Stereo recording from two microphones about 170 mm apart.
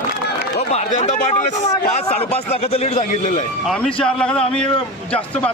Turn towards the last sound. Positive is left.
turn(degrees=10)  # may be behind; listen again after turning